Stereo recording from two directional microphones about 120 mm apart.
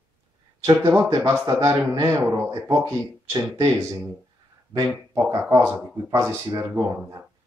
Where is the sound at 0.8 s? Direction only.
20° right (ahead or behind).